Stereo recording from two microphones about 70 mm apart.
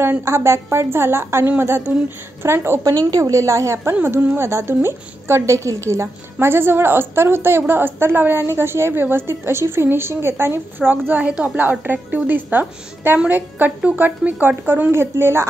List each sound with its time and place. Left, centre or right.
0.0 s a woman's voice: right
2.8 s a woman's voice: right